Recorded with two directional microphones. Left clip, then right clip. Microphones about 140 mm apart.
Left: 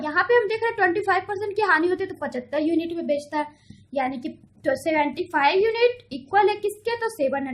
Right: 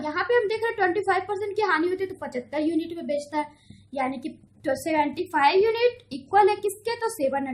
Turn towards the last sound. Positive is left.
turn(degrees=30)  # may be behind; listen again after turning